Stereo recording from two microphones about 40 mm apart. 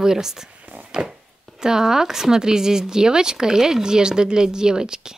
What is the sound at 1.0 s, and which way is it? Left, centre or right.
Speech, right.